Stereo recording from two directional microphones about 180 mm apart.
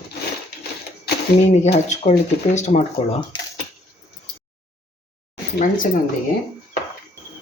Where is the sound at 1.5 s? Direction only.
40° left (ahead or behind).